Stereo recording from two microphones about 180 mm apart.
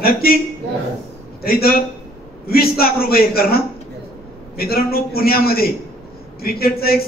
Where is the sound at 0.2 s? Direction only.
60° left (ahead or behind).